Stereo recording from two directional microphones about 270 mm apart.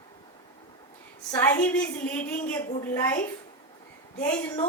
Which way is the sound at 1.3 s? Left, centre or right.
Centre.